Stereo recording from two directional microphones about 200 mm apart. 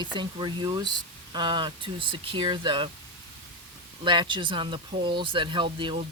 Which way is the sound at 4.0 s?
25° right (ahead or behind).